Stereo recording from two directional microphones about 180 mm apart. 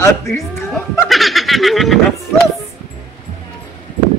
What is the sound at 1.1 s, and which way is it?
A man's voice, centre (ahead or behind).